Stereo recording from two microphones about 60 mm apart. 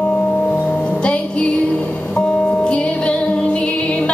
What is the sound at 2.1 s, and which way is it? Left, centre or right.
Music, centre.